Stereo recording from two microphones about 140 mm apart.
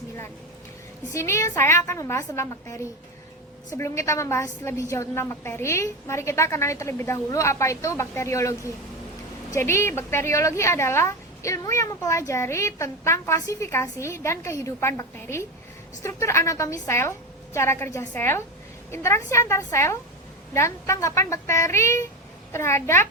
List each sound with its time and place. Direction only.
1.1 s a woman's voice: 20° left (ahead or behind)